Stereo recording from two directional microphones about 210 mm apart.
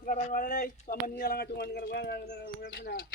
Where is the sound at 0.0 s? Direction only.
35° left (ahead or behind).